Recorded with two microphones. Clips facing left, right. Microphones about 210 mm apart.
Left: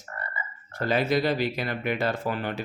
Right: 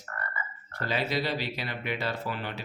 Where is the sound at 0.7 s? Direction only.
50° left (ahead or behind).